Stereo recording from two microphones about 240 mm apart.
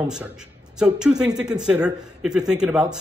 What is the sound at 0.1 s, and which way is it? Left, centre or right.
A man's voice, centre.